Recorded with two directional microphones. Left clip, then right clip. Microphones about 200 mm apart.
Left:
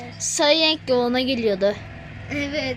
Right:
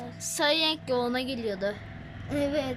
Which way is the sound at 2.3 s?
5° right (ahead or behind).